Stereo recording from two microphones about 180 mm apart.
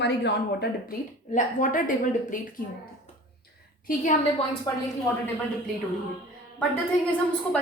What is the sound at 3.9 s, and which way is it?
Speech, 45° left (ahead or behind).